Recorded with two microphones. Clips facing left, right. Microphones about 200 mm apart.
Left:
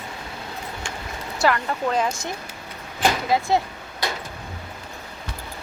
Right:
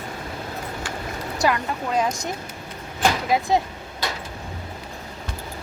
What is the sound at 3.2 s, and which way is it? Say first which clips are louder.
Speech: even; 15° right (ahead or behind).